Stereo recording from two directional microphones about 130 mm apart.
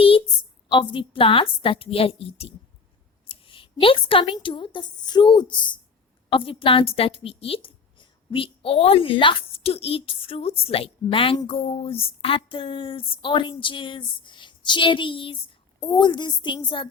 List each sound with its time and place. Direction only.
0.7 s a woman's voice: 40° left (ahead or behind)